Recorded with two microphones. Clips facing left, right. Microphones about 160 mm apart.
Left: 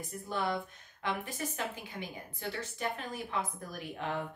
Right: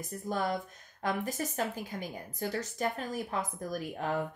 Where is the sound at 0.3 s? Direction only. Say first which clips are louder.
Right 2 dB; 40° right (ahead or behind).